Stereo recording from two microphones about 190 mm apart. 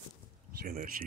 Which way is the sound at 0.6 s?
50° right (ahead or behind).